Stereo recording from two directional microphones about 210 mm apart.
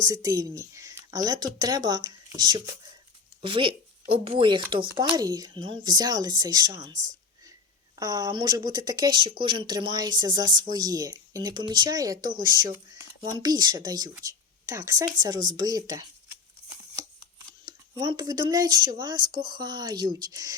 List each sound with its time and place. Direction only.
0.0 s speech: 15° right (ahead or behind)
17.7 s speech: 20° right (ahead or behind)